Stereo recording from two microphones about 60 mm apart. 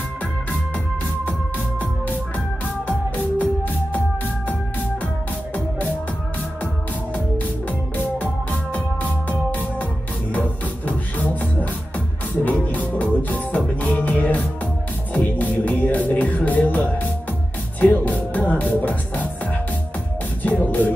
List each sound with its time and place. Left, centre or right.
2.9 s music: left
8.0 s music: left
12.7 s music: left